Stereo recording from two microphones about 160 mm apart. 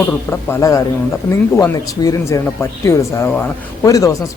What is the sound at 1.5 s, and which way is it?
Speech, 20° left (ahead or behind).